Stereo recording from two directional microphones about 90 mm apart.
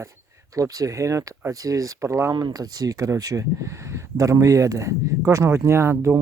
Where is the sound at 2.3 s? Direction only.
50° right (ahead or behind); by 6.2 s 25° right (ahead or behind).